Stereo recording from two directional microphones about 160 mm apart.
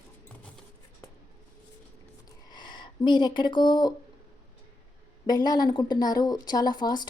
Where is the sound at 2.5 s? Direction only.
30° left (ahead or behind).